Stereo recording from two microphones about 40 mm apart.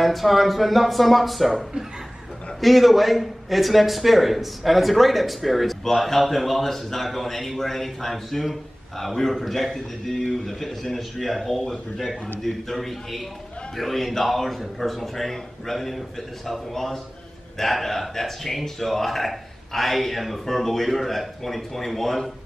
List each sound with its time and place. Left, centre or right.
0.0 s a man's voice: centre